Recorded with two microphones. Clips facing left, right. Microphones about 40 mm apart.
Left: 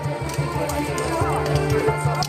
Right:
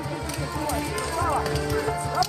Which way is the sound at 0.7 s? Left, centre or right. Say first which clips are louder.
Left 4 dB; centre.